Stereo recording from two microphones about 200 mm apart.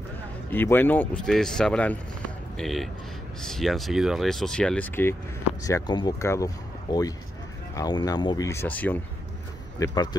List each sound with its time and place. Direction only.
0.5 s speech: 10° left (ahead or behind)